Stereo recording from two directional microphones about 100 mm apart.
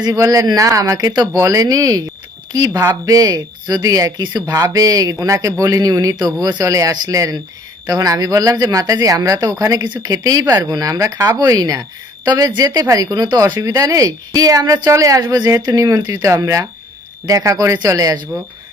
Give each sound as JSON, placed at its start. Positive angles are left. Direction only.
{"t": 0.0, "sound": "speech", "side_deg": -35}
{"t": 16.4, "sound": "speech", "side_deg": -35}